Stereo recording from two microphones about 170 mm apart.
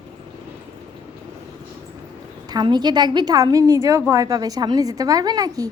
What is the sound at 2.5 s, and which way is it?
A woman's voice, 25° right (ahead or behind).